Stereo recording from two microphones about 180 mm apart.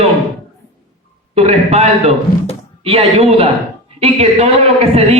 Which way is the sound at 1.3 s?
35° right (ahead or behind).